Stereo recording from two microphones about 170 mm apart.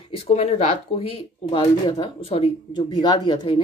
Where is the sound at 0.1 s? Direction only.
35° left (ahead or behind).